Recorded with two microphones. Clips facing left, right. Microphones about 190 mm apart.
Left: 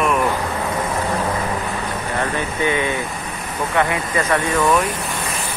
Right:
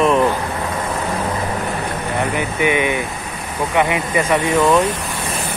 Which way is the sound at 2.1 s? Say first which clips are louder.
Right 2 dB; 15° right (ahead or behind).